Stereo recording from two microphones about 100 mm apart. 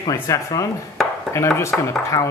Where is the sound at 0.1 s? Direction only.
30° left (ahead or behind).